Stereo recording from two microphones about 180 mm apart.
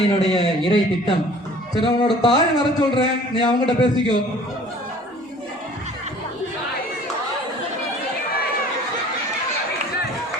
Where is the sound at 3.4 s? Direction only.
25° left (ahead or behind).